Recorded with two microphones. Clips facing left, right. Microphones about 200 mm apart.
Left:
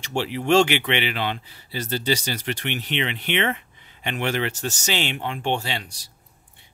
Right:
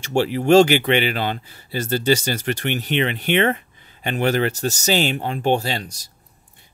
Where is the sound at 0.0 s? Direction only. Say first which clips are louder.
Right 6 dB; 45° right (ahead or behind).